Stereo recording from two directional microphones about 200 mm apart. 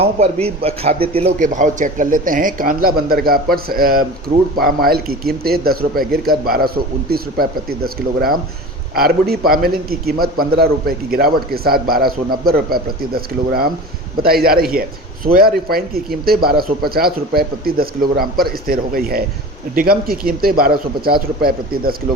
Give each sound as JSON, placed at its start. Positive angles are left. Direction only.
{"t": 0.0, "sound": "a man's voice", "side_deg": -30}
{"t": 9.0, "sound": "a man's voice", "side_deg": -50}